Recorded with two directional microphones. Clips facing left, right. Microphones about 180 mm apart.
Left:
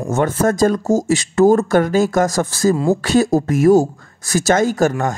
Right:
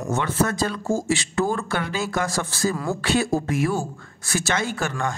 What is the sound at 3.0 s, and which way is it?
Speech, 40° left (ahead or behind).